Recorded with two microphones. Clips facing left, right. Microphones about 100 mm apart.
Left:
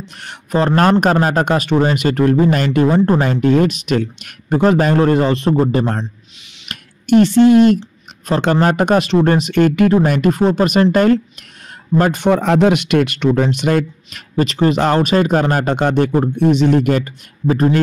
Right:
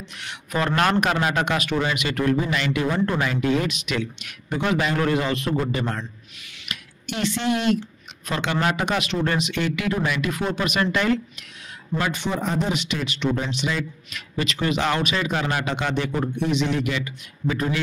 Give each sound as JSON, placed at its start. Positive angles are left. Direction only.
{"t": 0.2, "sound": "speech", "side_deg": 40}
{"t": 12.3, "sound": "a man's voice", "side_deg": 75}
{"t": 14.3, "sound": "speech", "side_deg": 40}